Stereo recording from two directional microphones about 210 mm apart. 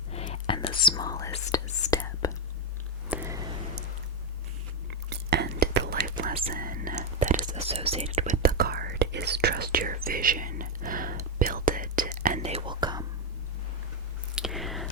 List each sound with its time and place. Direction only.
0.1 s whispering: 30° left (ahead or behind)
3.1 s a sound: 15° right (ahead or behind)
5.0 s whispering: 50° right (ahead or behind)
6.5 s whispering: 40° right (ahead or behind)
12.4 s whispering: 30° right (ahead or behind)
14.3 s whispering: centre (ahead or behind)